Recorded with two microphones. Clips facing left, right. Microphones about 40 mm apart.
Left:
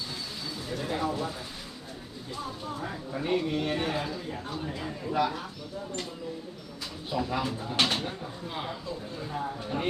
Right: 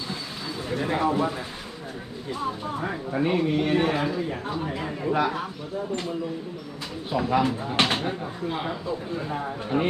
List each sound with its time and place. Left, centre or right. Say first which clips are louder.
0.1 s a sound: right 4 dB; right
2.3 s speech: right 7 dB; right
3.2 s a man's voice: right 4 dB; right
7.1 s speech: right 7 dB; right